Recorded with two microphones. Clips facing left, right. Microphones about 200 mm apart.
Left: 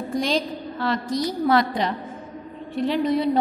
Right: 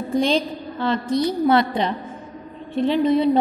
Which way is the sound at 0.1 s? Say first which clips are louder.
Right 4 dB; 25° right (ahead or behind).